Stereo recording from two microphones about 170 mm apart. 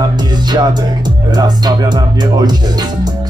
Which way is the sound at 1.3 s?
25° right (ahead or behind).